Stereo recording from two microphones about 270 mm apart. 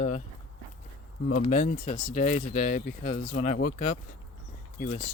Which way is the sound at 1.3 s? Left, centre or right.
Left.